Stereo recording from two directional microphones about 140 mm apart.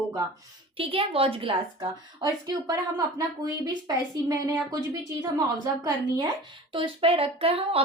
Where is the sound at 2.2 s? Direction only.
30° right (ahead or behind).